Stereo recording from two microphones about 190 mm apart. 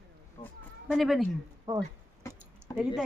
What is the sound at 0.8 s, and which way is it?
Speech, centre (ahead or behind).